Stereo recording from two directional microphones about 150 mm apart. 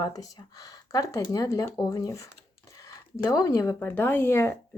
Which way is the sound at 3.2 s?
25° left (ahead or behind).